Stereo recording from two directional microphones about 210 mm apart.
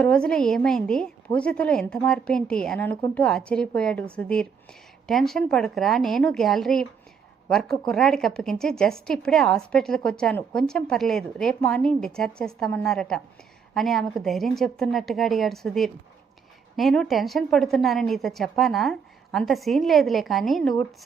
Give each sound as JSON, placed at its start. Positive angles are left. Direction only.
{"t": 0.0, "sound": "speech", "side_deg": 5}
{"t": 7.9, "sound": "speech", "side_deg": 0}